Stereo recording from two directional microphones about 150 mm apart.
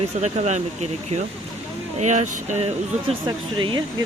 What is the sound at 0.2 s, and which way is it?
Speech, 50° right (ahead or behind).